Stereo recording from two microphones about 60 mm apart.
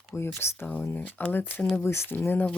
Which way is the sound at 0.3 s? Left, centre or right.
Left.